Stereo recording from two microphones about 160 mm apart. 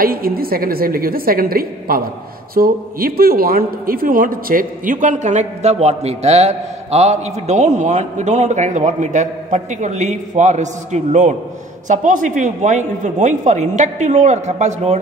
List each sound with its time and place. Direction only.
0.0 s a woman's voice: 65° right (ahead or behind); by 15.0 s 45° right (ahead or behind)